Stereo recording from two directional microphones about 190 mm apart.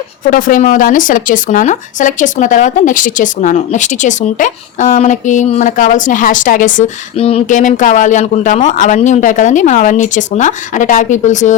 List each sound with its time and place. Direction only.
0.3 s speech: 45° left (ahead or behind)
7.2 s speech: 30° left (ahead or behind)